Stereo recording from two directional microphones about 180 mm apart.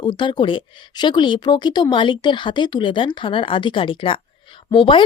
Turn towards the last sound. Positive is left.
turn(degrees=25)  # may be behind; listen again after turning